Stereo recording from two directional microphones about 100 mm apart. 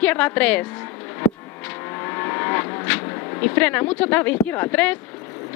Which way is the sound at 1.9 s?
25° left (ahead or behind).